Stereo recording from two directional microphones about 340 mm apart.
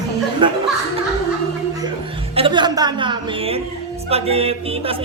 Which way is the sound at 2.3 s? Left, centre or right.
Centre.